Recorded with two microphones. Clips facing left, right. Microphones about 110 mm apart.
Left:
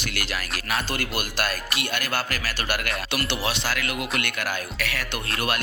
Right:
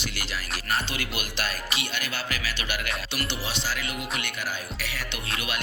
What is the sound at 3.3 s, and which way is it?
Speech, 65° left (ahead or behind).